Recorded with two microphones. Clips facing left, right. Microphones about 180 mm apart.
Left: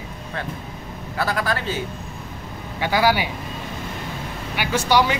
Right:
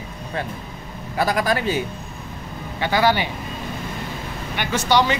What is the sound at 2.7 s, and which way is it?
Speech, 10° left (ahead or behind).